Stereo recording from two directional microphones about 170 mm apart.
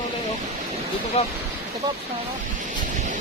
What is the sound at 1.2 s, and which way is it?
Speech, 35° left (ahead or behind).